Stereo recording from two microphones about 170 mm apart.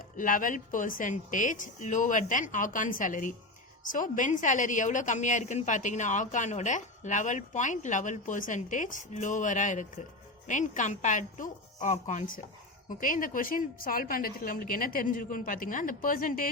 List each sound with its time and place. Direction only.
0.2 s a woman's voice: 50° left (ahead or behind)